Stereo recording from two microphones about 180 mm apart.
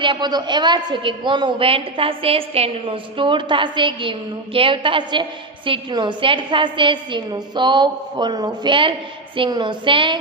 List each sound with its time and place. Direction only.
0.0 s a man's voice: 25° right (ahead or behind)